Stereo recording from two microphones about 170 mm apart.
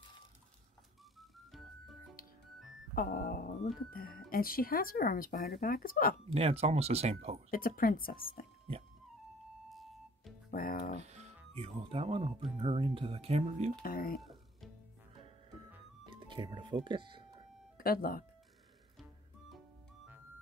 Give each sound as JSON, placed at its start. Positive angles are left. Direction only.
{"t": 2.9, "sound": "music", "side_deg": 55}
{"t": 3.9, "sound": "speech", "side_deg": 60}
{"t": 6.3, "sound": "speech", "side_deg": -35}
{"t": 7.5, "sound": "speech", "side_deg": 55}
{"t": 9.7, "sound": "music", "side_deg": 0}
{"t": 10.5, "sound": "speech", "side_deg": 60}
{"t": 11.0, "sound": "speech", "side_deg": -40}
{"t": 13.8, "sound": "speech", "side_deg": 60}
{"t": 16.1, "sound": "music", "side_deg": -30}
{"t": 17.7, "sound": "speech", "side_deg": 60}